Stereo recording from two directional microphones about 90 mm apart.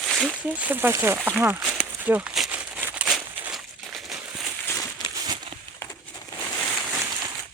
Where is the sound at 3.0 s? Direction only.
5° right (ahead or behind).